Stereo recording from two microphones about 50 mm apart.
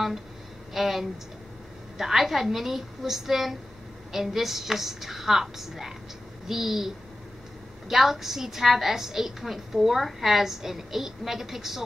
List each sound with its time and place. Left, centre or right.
0.7 s a woman's voice: centre
7.9 s a woman's voice: centre